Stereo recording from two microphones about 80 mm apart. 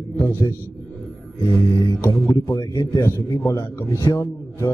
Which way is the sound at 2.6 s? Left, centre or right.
Left.